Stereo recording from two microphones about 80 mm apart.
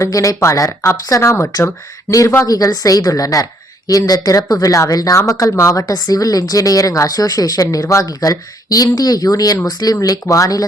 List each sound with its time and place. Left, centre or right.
0.0 s speech: left